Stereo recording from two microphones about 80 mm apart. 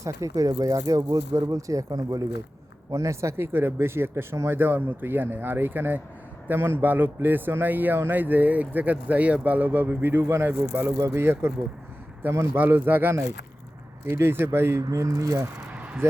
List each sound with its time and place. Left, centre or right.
0.0 s speech: right
2.9 s speech: right
14.8 s speech: right
15.7 s a sound: centre